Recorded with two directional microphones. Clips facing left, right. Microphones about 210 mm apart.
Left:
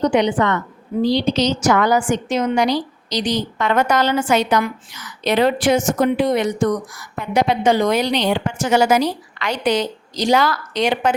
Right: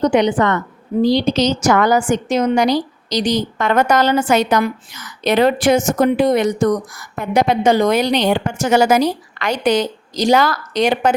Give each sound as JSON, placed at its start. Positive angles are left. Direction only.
{"t": 0.0, "sound": "a woman's voice", "side_deg": -45}